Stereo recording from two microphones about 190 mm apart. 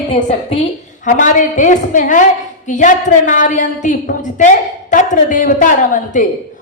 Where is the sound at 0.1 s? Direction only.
35° left (ahead or behind).